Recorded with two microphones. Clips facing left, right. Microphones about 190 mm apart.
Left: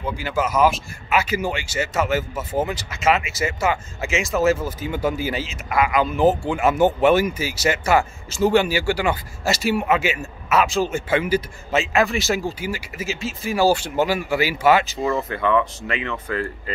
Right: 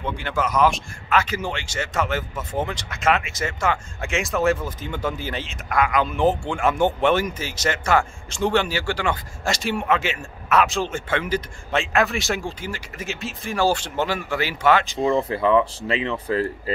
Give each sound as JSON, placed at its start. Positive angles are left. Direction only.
{"t": 0.0, "sound": "speech", "side_deg": 5}
{"t": 15.1, "sound": "speech", "side_deg": -30}